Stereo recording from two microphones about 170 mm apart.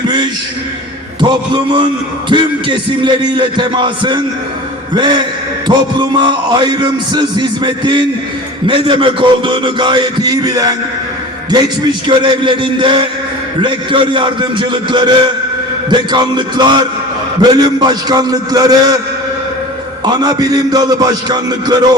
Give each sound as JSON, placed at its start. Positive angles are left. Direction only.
{"t": 2.3, "sound": "a man's voice", "side_deg": -25}
{"t": 20.1, "sound": "a man's voice", "side_deg": -25}